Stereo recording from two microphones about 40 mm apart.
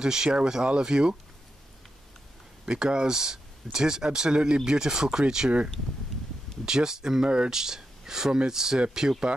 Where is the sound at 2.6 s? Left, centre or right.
Right.